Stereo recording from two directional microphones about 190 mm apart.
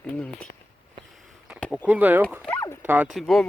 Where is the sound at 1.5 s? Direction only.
Centre (ahead or behind).